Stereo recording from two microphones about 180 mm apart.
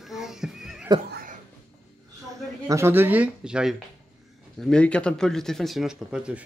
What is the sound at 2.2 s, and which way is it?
Speech, 15° right (ahead or behind).